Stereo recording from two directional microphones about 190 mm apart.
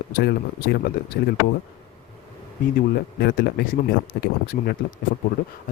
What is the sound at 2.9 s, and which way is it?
Speech, 60° left (ahead or behind).